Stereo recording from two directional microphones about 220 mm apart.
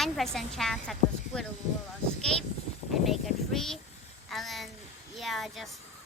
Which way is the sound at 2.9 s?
Centre (ahead or behind).